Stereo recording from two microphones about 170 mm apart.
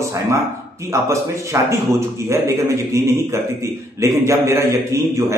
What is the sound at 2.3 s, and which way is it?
Speech, 20° right (ahead or behind).